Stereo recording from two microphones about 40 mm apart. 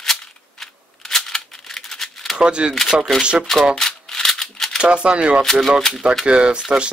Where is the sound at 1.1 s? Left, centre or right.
Centre.